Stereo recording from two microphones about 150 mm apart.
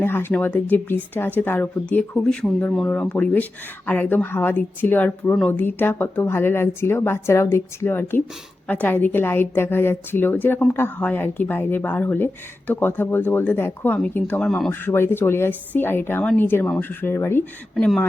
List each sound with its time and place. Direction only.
0.0 s a woman's voice: 15° left (ahead or behind)
14.7 s a woman's voice: 15° left (ahead or behind)